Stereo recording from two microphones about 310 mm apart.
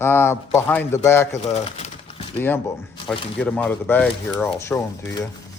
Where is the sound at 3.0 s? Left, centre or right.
Centre.